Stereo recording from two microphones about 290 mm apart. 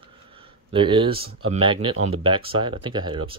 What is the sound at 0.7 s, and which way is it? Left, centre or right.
Speech, centre.